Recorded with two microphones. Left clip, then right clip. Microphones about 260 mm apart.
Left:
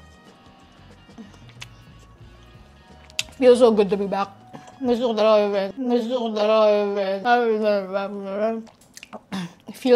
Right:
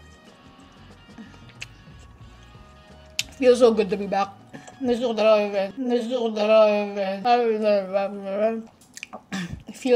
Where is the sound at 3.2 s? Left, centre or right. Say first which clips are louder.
Left 2 dB; left; by 9.5 s centre.